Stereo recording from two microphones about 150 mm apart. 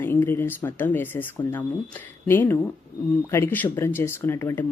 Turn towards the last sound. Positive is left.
turn(degrees=15)  # may be behind; listen again after turning